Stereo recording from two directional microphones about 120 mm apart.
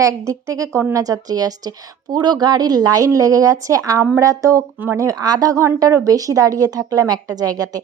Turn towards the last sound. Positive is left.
turn(degrees=-30)  # may be behind; listen again after turning